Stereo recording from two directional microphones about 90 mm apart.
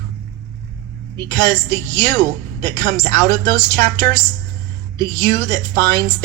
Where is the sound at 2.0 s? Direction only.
35° left (ahead or behind).